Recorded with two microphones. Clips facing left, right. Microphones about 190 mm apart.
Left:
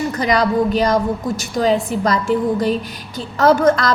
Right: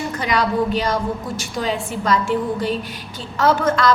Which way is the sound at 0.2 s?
40° left (ahead or behind).